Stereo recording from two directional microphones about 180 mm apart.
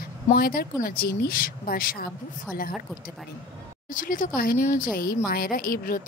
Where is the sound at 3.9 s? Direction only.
50° left (ahead or behind).